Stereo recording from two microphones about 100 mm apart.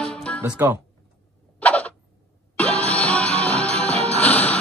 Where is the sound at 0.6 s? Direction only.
25° right (ahead or behind).